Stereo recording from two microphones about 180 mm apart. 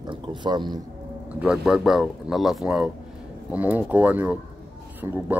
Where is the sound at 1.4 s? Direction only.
Centre (ahead or behind).